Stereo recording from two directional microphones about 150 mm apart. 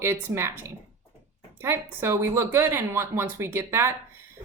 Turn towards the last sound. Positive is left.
turn(degrees=-15)  # may be behind; listen again after turning